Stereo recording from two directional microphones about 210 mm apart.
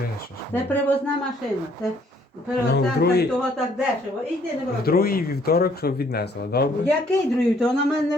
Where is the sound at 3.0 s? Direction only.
50° left (ahead or behind).